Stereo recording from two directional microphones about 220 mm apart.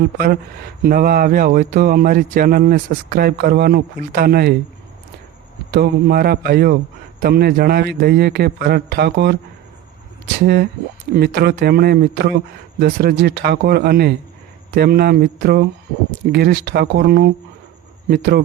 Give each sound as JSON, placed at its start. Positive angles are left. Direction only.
{"t": 0.8, "sound": "speech", "side_deg": -40}
{"t": 5.7, "sound": "a man's voice", "side_deg": -45}
{"t": 10.4, "sound": "a man's voice", "side_deg": -45}